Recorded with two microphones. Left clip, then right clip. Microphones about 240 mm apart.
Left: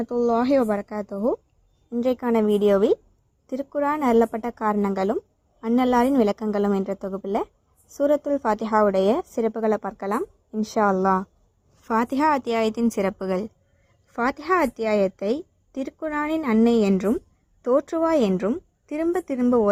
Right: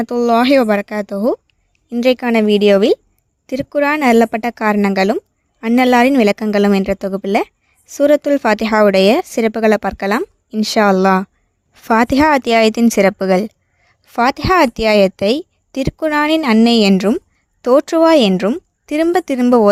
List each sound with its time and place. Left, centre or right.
0.2 s speech: right
11.8 s speech: right
12.3 s speech: right
13.0 s a woman's voice: right